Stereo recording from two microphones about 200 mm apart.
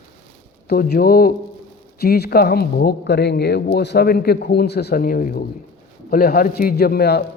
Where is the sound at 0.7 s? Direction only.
50° left (ahead or behind).